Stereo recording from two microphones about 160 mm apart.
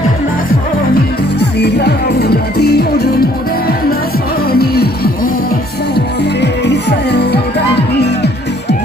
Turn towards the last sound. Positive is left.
turn(degrees=90)